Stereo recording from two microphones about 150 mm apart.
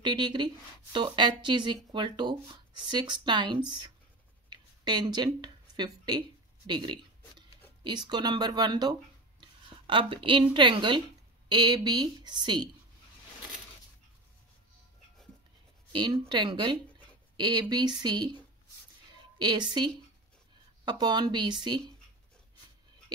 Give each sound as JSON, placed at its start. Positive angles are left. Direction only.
{"t": 0.0, "sound": "a woman's voice", "side_deg": -30}
{"t": 4.5, "sound": "a sound", "side_deg": -30}
{"t": 7.8, "sound": "a woman's voice", "side_deg": -30}
{"t": 15.9, "sound": "a woman's voice", "side_deg": -30}